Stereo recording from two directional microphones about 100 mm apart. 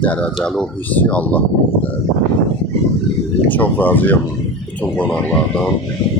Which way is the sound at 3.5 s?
15° left (ahead or behind).